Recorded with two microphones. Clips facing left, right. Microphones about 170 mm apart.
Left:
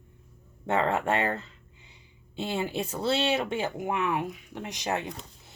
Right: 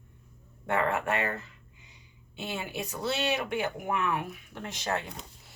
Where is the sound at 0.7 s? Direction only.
25° left (ahead or behind).